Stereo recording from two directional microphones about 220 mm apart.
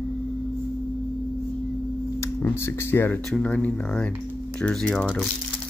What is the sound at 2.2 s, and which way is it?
Speech, 10° left (ahead or behind).